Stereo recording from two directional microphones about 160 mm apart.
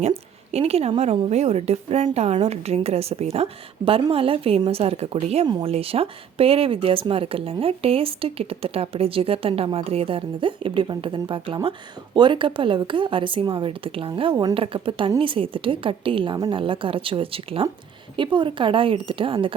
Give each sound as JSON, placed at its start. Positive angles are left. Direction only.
{"t": 0.5, "sound": "speech", "side_deg": -40}
{"t": 5.5, "sound": "speech", "side_deg": -25}
{"t": 5.7, "sound": "speech", "side_deg": -35}